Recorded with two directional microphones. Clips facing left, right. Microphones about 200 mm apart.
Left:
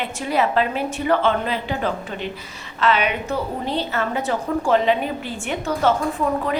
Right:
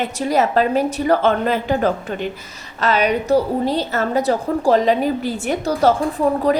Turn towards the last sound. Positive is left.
turn(degrees=-35)  # may be behind; listen again after turning